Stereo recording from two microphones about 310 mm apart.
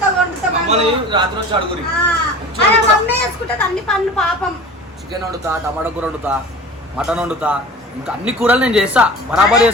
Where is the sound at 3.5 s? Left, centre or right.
Centre.